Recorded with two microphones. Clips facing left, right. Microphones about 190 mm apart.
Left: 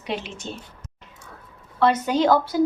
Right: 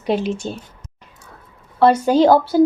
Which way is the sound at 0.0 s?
40° right (ahead or behind).